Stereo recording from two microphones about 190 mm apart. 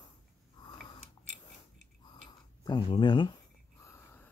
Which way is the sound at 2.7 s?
25° left (ahead or behind).